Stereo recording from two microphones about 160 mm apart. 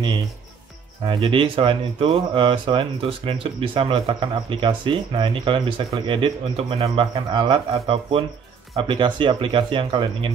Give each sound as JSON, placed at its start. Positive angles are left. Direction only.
{"t": 1.0, "sound": "speech", "side_deg": -35}